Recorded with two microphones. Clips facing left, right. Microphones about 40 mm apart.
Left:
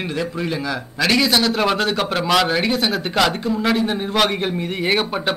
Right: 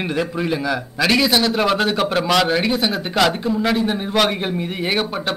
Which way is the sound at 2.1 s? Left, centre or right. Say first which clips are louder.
Right 1 dB; centre.